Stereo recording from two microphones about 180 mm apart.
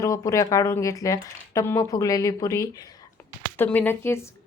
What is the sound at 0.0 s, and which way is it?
A woman's voice, 15° left (ahead or behind).